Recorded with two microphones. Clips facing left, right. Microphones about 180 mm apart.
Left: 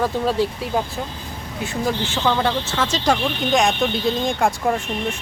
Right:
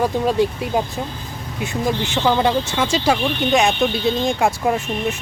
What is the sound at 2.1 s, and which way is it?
Speech, 15° right (ahead or behind).